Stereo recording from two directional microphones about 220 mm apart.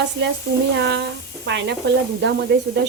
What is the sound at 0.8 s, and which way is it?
Speech, 50° right (ahead or behind).